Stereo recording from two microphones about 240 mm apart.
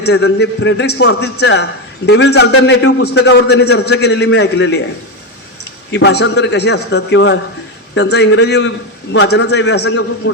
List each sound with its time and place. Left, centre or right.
0.0 s a man's voice: left
2.5 s a man's voice: left
2.8 s a man's voice: left
5.9 s a man's voice: left